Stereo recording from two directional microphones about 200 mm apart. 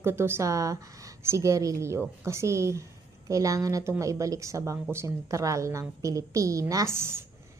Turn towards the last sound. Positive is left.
turn(degrees=-10)  # may be behind; listen again after turning